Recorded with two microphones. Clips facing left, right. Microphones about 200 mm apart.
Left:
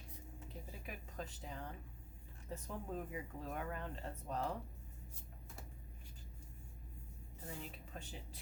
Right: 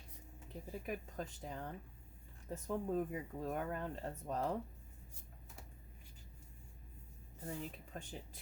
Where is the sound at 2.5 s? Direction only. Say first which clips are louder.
Right 8 dB; 45° right (ahead or behind).